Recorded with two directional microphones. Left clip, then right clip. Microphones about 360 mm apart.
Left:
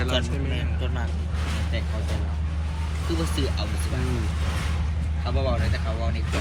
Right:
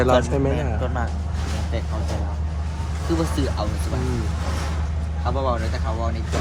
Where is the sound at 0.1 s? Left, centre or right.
Centre.